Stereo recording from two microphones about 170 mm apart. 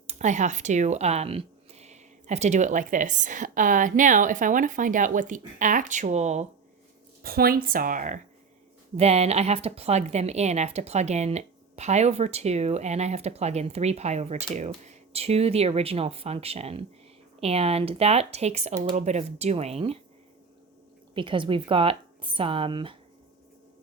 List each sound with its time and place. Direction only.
0.1 s speech: 45° right (ahead or behind)
7.2 s a woman's voice: 60° right (ahead or behind)
9.0 s a woman's voice: 40° right (ahead or behind)
21.2 s a woman's voice: 30° right (ahead or behind)